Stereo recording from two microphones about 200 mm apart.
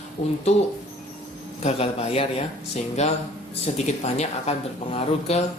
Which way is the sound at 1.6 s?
30° left (ahead or behind).